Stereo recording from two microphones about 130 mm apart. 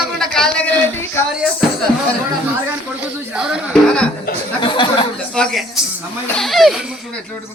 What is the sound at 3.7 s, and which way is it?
Music, 5° left (ahead or behind).